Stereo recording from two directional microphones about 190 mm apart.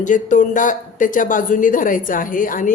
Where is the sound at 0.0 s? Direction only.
40° left (ahead or behind).